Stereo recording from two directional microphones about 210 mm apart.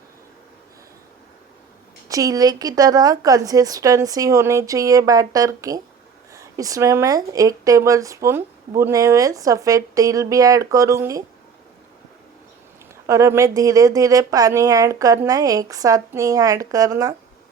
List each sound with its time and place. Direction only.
2.0 s speech: 15° right (ahead or behind)
13.1 s speech: 15° right (ahead or behind)